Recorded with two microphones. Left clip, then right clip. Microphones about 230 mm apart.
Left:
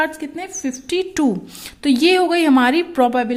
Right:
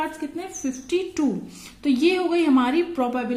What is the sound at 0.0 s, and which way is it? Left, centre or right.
A woman's voice, left.